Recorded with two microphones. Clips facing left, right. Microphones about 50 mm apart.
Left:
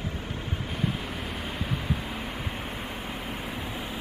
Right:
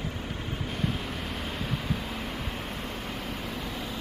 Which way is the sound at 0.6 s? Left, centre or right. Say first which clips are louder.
Even; centre.